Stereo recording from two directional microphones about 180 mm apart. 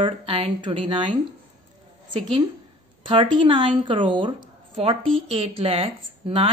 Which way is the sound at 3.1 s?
30° right (ahead or behind).